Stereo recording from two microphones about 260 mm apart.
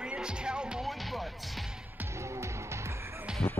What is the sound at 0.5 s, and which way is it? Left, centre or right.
Music, centre.